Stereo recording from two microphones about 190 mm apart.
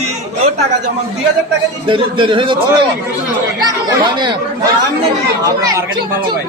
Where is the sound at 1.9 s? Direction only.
25° right (ahead or behind).